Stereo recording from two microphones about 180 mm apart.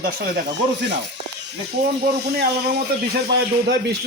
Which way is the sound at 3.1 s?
65° right (ahead or behind).